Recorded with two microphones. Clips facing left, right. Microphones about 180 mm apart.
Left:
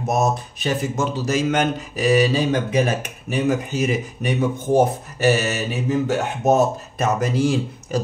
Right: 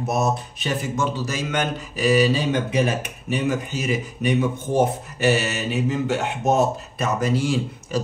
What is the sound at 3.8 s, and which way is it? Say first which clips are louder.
Speech: left 2 dB; 40° left (ahead or behind).